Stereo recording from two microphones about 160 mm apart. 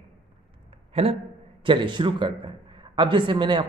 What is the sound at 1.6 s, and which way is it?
A man's voice, 30° right (ahead or behind).